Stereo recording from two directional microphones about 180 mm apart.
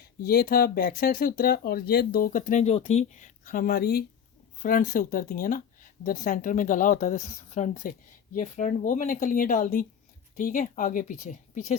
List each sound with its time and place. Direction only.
0.0 s speech: 60° left (ahead or behind)
4.6 s speech: 50° left (ahead or behind)